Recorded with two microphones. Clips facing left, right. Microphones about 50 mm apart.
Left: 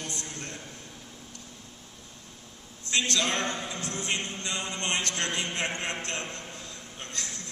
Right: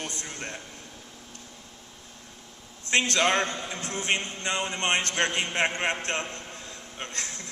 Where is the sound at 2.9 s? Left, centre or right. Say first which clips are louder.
Right 5 dB; right.